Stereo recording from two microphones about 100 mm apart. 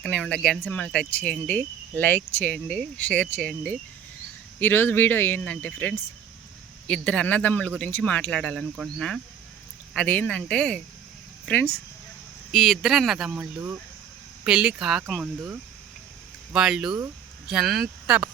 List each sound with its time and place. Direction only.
0.0 s speech: 10° left (ahead or behind)
12.5 s speech: centre (ahead or behind)
16.5 s speech: 5° right (ahead or behind)